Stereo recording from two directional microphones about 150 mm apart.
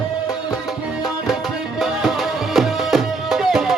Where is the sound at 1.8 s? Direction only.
Centre (ahead or behind).